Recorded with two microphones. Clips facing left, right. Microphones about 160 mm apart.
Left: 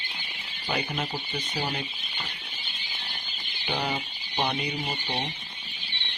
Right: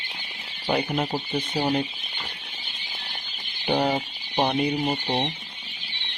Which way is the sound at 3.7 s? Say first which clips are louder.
Right 7 dB; 50° right (ahead or behind).